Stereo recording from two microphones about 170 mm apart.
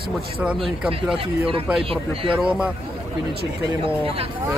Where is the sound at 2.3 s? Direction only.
5° right (ahead or behind).